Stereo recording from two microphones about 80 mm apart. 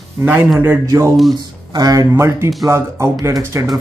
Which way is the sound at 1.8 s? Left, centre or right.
Right.